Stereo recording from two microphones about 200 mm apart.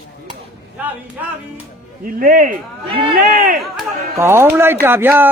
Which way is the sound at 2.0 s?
45° right (ahead or behind).